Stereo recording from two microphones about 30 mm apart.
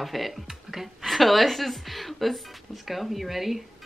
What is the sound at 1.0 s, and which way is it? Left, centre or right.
Speech, centre.